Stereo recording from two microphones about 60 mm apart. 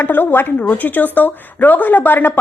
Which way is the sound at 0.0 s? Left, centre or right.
Left.